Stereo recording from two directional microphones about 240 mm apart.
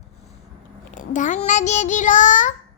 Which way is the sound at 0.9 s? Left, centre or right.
Left.